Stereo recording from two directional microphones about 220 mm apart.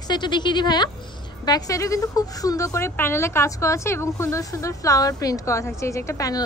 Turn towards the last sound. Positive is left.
turn(degrees=15)  # may be behind; listen again after turning